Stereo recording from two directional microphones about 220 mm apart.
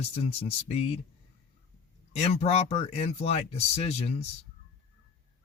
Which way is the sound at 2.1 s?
30° left (ahead or behind).